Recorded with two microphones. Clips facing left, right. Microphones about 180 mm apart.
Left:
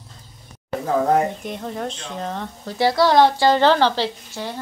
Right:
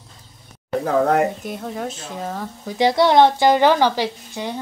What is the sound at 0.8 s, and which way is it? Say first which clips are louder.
Speech: even; 65° right (ahead or behind).